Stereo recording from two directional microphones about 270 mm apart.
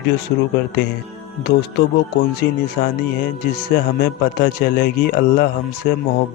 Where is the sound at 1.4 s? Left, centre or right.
Left.